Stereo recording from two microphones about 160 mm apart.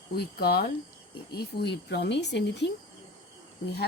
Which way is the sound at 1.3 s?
90° left.